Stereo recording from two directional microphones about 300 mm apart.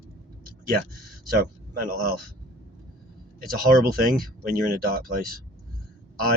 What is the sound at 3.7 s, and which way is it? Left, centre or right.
A man's voice, right.